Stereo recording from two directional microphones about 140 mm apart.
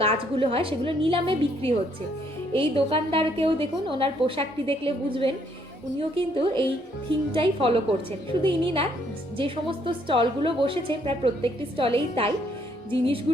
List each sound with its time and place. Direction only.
0.0 s a woman's voice: 45° right (ahead or behind)